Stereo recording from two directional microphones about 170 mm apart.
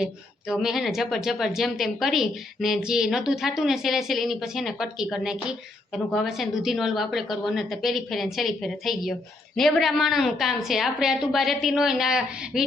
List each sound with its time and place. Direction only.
0.0 s speech: 5° right (ahead or behind)